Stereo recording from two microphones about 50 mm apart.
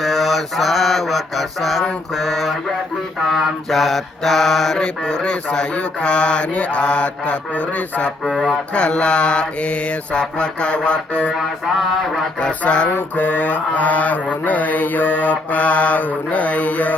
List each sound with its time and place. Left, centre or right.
0.0 s mantra: centre; by 11.3 s left
12.4 s mantra: left
12.9 s mantra: left